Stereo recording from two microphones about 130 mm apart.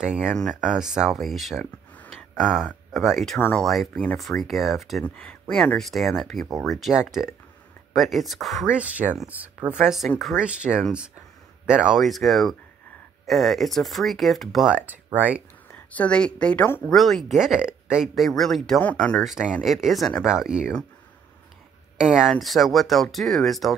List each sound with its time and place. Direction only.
0.0 s speech: 5° right (ahead or behind)
3.3 s speech: 15° left (ahead or behind)
3.6 s speech: centre (ahead or behind)
5.0 s speech: 15° left (ahead or behind)
5.8 s speech: centre (ahead or behind)
15.7 s speech: 10° left (ahead or behind)
16.9 s speech: centre (ahead or behind)
21.9 s speech: 5° right (ahead or behind)